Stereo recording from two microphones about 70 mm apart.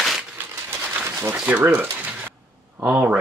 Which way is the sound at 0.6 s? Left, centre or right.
Right.